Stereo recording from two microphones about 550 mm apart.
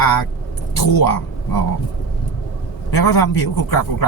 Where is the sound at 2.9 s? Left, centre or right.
Left.